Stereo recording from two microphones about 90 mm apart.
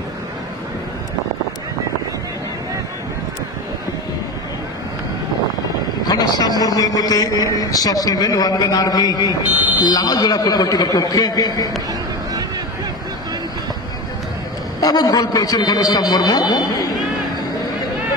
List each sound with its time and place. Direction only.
6.0 s a man's voice: 45° left (ahead or behind)
14.8 s a man's voice: 45° left (ahead or behind)